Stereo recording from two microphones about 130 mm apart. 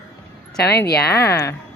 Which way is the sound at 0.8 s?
25° left (ahead or behind).